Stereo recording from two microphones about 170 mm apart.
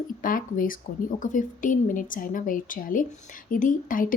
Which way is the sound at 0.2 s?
55° left (ahead or behind).